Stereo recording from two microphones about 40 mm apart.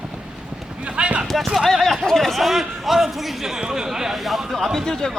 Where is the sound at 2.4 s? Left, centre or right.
Centre.